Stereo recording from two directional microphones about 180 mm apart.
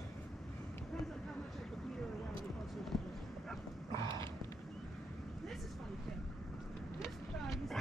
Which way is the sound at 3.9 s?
25° right (ahead or behind).